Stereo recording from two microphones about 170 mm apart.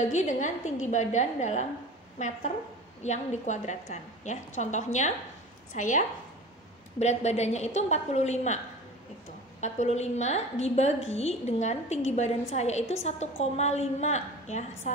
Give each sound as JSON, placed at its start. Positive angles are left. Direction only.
{"t": 0.1, "sound": "a woman's voice", "side_deg": 45}
{"t": 9.6, "sound": "a woman's voice", "side_deg": 40}